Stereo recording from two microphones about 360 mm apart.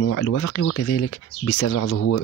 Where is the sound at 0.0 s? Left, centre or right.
Left.